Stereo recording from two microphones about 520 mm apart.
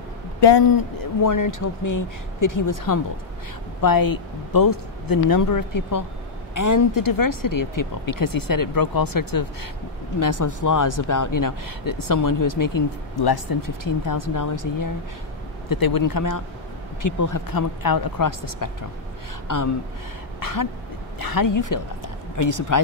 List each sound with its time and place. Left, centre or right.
0.4 s speech: left
1.2 s speech: left